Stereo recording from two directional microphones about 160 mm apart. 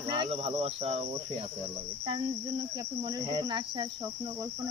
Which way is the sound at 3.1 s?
25° right (ahead or behind).